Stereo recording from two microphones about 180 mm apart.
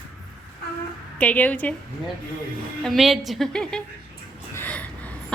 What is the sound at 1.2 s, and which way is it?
Speech, 10° left (ahead or behind).